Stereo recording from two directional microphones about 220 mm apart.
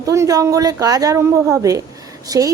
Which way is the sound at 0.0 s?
15° right (ahead or behind).